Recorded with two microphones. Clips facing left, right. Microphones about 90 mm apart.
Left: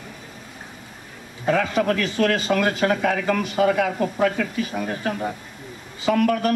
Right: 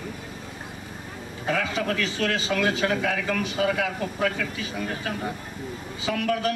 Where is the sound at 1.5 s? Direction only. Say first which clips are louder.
Left 6 dB; 45° left (ahead or behind).